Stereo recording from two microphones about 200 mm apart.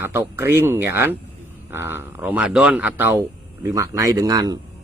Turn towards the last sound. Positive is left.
turn(degrees=-20)  # may be behind; listen again after turning